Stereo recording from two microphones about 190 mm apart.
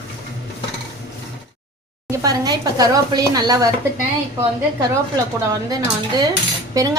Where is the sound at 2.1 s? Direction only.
20° right (ahead or behind).